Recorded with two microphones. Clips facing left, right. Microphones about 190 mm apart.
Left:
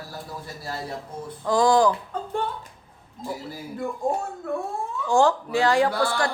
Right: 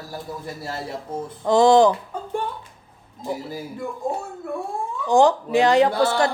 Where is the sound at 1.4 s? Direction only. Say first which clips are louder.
Right 5 dB; 25° right (ahead or behind).